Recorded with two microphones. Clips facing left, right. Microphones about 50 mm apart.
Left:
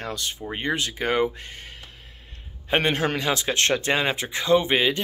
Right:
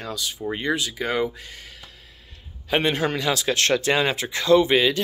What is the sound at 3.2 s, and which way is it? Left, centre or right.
Speech, left.